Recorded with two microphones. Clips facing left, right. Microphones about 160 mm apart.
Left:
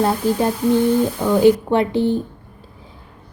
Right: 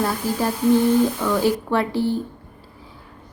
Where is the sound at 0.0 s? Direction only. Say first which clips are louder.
Left 5 dB; 20° left (ahead or behind).